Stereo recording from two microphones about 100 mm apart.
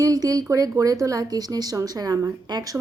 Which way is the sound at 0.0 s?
35° right (ahead or behind).